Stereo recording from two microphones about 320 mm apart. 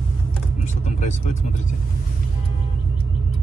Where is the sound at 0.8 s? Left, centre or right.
Left.